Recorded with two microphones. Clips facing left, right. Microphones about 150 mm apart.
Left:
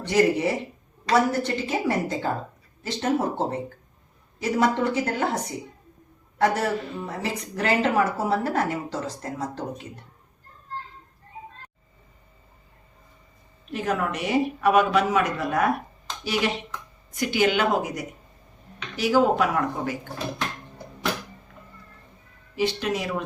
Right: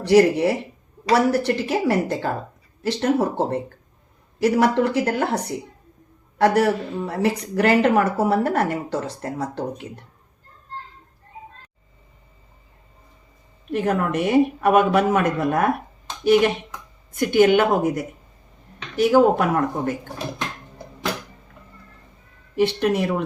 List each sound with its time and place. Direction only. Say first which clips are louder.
0.0 s speech: right 6 dB; 70° right (ahead or behind)
13.7 s speech: right 5 dB; 55° right (ahead or behind)
22.5 s speech: right 6 dB; 60° right (ahead or behind)